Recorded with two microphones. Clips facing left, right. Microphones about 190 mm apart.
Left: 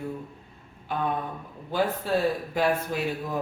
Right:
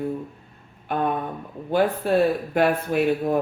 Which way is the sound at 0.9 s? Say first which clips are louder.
Right 4 dB; 60° right (ahead or behind).